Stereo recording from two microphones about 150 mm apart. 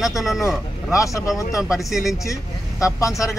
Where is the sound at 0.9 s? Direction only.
20° left (ahead or behind).